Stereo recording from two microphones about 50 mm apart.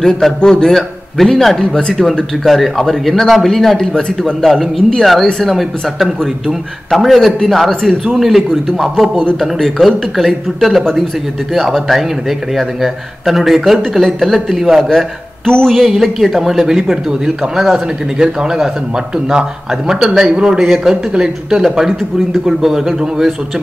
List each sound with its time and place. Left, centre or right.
0.4 s speech: centre
1.6 s speech: centre
2.4 s a man's voice: centre
14.9 s speech: centre
15.7 s a man's voice: centre
20.2 s speech: centre